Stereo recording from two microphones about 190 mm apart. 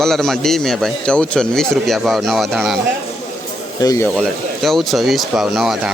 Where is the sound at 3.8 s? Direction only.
20° left (ahead or behind).